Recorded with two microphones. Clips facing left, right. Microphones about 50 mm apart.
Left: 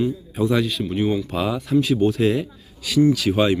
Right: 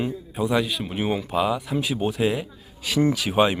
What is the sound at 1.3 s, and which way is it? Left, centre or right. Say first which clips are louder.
Speech: left 2 dB; centre.